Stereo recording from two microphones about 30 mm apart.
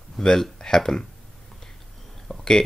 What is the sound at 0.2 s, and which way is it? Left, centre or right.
Speech, centre.